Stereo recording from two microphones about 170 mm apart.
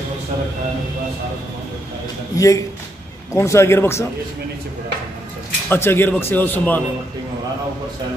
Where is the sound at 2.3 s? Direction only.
20° left (ahead or behind).